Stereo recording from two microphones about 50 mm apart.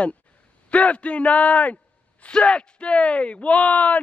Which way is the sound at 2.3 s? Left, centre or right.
Centre.